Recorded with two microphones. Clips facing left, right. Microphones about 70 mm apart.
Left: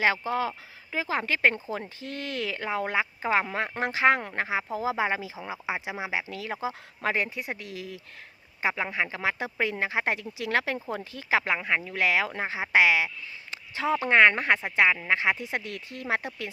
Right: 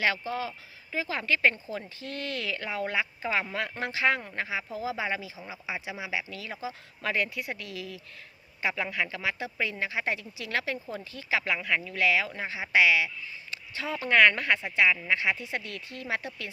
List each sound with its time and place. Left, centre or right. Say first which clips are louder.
0.0 s speech: left 4 dB; left
2.0 s speech: left 1 dB; right
2.4 s speech: left 5 dB; left
5.4 s speech: left 4 dB; left
7.6 s speech: left 1 dB; right
8.6 s speech: left 2 dB; left
15.6 s speech: left 2 dB; right
16.0 s speech: left 4 dB; left